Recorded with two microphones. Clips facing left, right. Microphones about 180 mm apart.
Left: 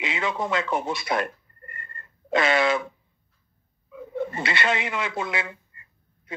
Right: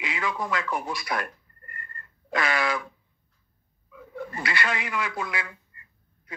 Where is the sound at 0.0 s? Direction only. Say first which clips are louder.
Left 3 dB; 25° left (ahead or behind).